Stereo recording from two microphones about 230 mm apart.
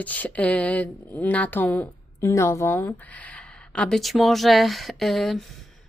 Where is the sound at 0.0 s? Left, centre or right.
Centre.